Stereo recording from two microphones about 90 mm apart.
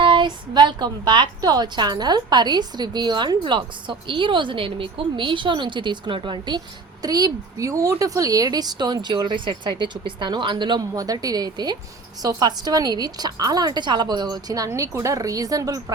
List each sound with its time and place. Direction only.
0.0 s a woman's voice: 65° right (ahead or behind)
7.0 s a woman's voice: 45° right (ahead or behind)
10.9 s a woman's voice: 45° right (ahead or behind)